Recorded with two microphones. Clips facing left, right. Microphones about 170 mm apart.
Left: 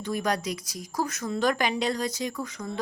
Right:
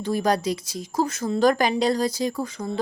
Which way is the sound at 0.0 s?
30° right (ahead or behind).